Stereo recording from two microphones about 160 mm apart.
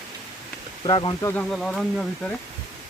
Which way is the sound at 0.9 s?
30° left (ahead or behind).